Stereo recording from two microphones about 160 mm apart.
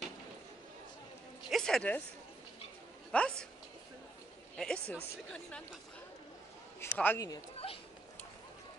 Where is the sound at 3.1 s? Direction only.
5° left (ahead or behind).